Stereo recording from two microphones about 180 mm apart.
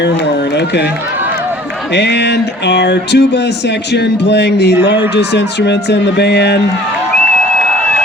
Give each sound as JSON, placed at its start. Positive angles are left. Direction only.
{"t": 0.5, "sound": "speech", "side_deg": 70}
{"t": 1.9, "sound": "speech", "side_deg": 70}